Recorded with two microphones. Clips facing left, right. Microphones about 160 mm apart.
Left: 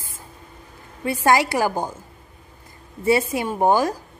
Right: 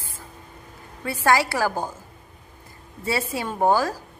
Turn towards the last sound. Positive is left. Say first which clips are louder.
# left 2 dB
turn(degrees=20)  # may be behind; listen again after turning